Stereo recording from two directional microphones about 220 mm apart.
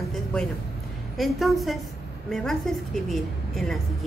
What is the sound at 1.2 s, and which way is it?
A woman's voice, centre (ahead or behind).